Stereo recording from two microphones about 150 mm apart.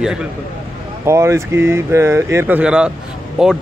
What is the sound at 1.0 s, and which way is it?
Speech, 20° right (ahead or behind).